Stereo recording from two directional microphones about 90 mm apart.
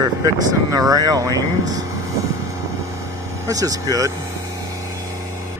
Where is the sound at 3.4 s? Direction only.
40° right (ahead or behind).